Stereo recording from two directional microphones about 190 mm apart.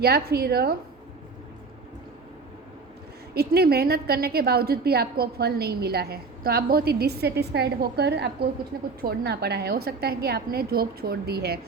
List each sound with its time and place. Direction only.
0.0 s a woman's voice: 55° right (ahead or behind)
3.3 s a woman's voice: 55° right (ahead or behind)